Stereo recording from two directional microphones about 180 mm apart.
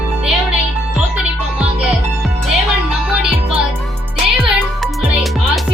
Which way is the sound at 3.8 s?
Centre (ahead or behind).